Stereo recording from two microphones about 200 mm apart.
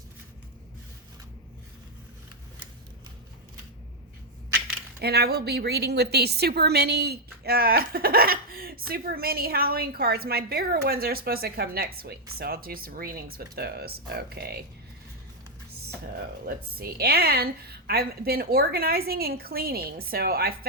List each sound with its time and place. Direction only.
4.9 s a woman's voice: 50° right (ahead or behind)
16.5 s a woman's voice: 50° right (ahead or behind)